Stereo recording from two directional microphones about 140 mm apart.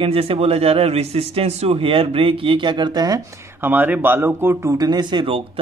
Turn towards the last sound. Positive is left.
turn(degrees=-35)  # may be behind; listen again after turning